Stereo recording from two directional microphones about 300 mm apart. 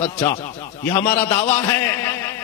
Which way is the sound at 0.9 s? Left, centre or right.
Centre.